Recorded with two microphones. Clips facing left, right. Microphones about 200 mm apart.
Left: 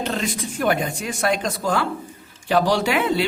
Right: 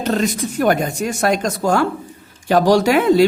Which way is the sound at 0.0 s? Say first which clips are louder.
Right 6 dB; 40° right (ahead or behind).